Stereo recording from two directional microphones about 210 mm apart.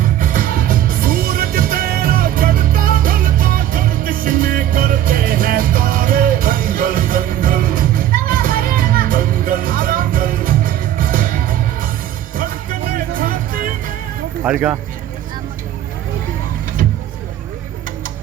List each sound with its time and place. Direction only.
0.0 s music: 40° right (ahead or behind)
13.1 s music: 40° right (ahead or behind)
14.4 s speech: 5° right (ahead or behind)